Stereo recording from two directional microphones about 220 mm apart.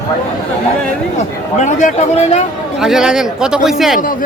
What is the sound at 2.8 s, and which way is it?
Speech, centre (ahead or behind).